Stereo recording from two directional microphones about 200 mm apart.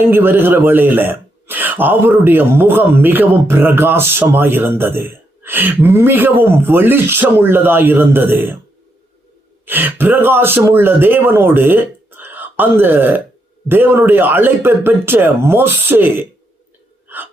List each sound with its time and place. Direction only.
0.0 s speech: 10° right (ahead or behind)
9.6 s speech: 10° right (ahead or behind)